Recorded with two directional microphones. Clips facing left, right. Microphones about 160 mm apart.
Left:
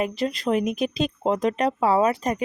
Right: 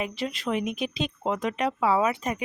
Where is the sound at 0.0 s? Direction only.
40° left (ahead or behind).